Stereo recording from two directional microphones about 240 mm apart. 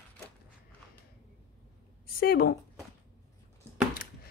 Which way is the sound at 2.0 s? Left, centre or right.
Left.